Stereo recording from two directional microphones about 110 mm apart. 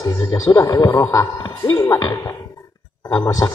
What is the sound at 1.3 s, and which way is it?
Speech, 40° left (ahead or behind).